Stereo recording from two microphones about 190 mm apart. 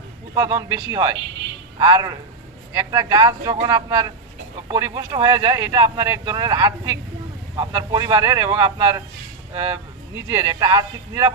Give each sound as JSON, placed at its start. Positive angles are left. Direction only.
{"t": 0.3, "sound": "speech", "side_deg": -20}